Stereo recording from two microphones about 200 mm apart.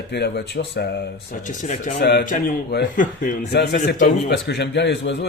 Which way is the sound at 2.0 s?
55° left (ahead or behind).